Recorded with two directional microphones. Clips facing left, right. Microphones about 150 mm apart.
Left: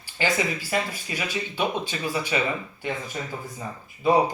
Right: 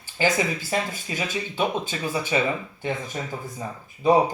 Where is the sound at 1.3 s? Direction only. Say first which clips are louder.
Right 1 dB; 40° right (ahead or behind).